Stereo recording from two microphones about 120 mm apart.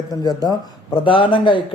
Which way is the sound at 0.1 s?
35° left (ahead or behind).